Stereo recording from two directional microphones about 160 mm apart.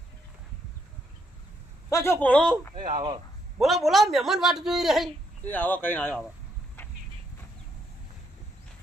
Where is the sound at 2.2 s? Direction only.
5° left (ahead or behind).